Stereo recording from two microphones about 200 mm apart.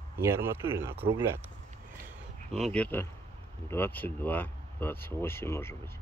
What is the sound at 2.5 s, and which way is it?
Speech, 5° left (ahead or behind).